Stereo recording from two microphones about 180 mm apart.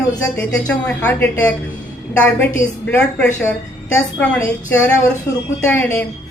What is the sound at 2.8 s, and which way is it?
Speech, 10° left (ahead or behind).